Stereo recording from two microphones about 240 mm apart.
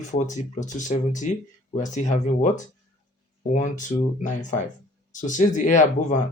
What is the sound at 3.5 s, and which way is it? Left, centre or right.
Speech, left.